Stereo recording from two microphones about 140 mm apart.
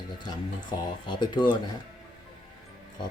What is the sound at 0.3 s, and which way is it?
Speech, 30° left (ahead or behind).